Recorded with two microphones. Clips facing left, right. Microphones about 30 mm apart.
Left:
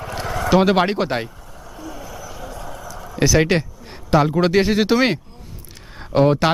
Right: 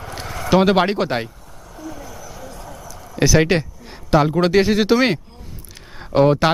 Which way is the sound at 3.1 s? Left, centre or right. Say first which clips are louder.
Right 1 dB; centre.